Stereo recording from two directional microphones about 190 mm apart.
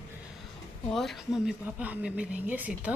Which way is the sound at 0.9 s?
Centre (ahead or behind).